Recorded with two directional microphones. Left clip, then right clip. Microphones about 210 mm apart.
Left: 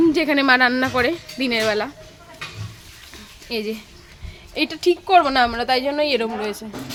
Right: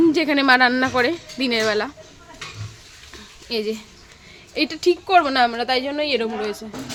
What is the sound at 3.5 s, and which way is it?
A woman's voice, centre (ahead or behind).